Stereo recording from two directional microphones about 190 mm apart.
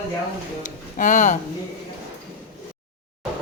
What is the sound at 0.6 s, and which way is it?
Music, 40° left (ahead or behind).